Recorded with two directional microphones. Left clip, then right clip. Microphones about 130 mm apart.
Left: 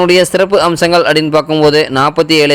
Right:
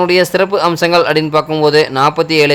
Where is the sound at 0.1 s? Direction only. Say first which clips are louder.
Left 3 dB; 30° left (ahead or behind).